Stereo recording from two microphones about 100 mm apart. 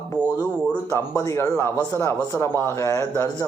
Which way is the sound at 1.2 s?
35° left (ahead or behind).